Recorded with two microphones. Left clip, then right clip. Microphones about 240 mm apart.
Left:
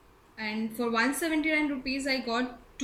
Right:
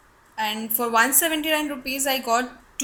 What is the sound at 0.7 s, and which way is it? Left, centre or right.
A woman's voice, right.